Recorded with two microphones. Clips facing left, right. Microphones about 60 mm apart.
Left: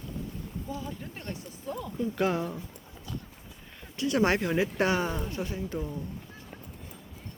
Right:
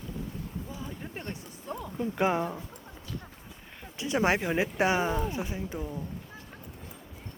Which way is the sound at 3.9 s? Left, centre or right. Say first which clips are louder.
Left 1 dB; right.